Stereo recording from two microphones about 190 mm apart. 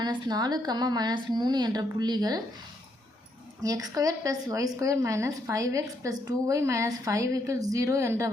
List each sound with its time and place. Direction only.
0.0 s a woman's voice: 20° right (ahead or behind)
3.6 s a woman's voice: 20° right (ahead or behind)